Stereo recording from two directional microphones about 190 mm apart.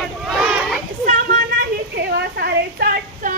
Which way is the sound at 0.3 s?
Centre (ahead or behind).